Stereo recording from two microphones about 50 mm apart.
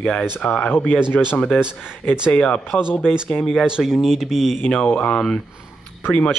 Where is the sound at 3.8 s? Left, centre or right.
Centre.